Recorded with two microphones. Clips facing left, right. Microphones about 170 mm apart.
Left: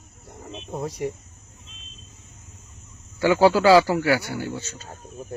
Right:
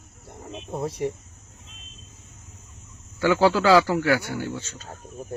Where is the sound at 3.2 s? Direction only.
10° left (ahead or behind).